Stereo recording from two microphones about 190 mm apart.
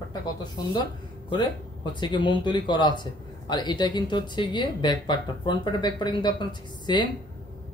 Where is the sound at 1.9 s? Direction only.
25° left (ahead or behind).